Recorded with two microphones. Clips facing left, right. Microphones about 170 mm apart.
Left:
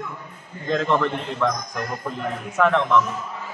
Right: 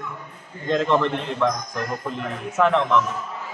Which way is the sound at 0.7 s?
Centre (ahead or behind).